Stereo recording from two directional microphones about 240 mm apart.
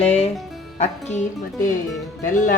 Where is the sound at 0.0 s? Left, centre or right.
Left.